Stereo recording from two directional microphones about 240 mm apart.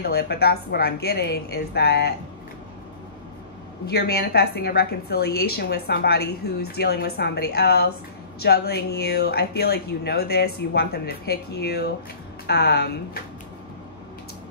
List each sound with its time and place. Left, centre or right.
0.0 s a woman's voice: left
3.8 s a woman's voice: left